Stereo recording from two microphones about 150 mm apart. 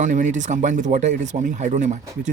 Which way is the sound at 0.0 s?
55° right (ahead or behind).